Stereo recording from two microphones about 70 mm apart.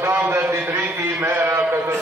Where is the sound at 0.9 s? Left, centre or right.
Right.